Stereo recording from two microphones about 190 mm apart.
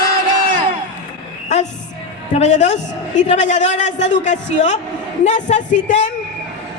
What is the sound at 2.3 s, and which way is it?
A woman's voice, 35° left (ahead or behind).